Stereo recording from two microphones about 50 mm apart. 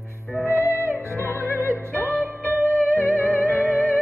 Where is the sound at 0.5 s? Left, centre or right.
Left.